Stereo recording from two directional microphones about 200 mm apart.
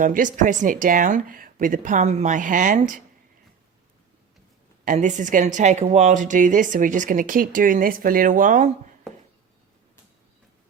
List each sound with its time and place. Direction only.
0.0 s speech: 40° right (ahead or behind)
4.9 s speech: 40° right (ahead or behind)